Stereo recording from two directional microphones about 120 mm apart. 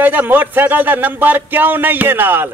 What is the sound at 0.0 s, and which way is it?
Speech, 15° right (ahead or behind).